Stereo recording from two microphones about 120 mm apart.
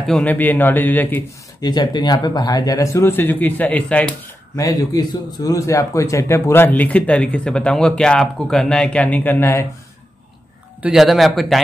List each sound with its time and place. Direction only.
0.0 s a man's voice: centre (ahead or behind)
0.3 s a man's voice: 15° left (ahead or behind)
1.6 s speech: 35° left (ahead or behind); by 4.1 s 10° left (ahead or behind)
4.6 s a man's voice: 30° left (ahead or behind)
10.8 s a man's voice: 5° right (ahead or behind)